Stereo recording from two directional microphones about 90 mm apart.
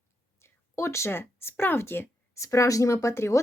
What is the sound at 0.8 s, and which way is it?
Speech, 30° left (ahead or behind).